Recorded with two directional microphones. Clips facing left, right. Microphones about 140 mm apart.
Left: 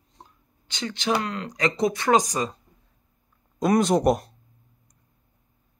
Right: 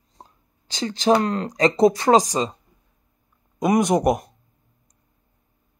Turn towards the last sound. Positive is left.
turn(degrees=-15)  # may be behind; listen again after turning